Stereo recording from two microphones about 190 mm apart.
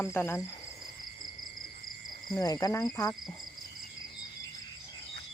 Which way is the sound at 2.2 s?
20° left (ahead or behind).